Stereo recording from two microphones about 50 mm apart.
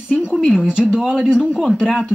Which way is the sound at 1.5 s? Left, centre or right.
Centre.